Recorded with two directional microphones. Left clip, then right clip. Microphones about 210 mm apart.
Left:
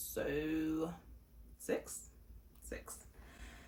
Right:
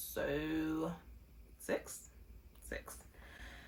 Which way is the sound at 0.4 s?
15° right (ahead or behind).